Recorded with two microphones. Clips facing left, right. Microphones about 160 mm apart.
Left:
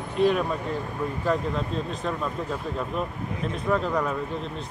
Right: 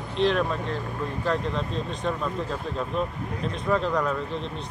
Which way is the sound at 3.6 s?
5° left (ahead or behind).